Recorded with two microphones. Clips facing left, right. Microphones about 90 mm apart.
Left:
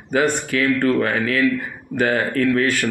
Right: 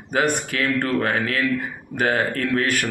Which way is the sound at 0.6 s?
35° right (ahead or behind).